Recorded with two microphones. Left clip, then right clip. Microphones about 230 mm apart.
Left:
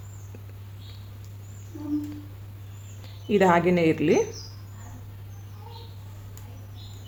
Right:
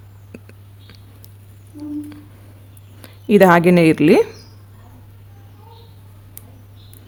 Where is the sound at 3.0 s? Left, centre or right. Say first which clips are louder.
Right 9 dB; right.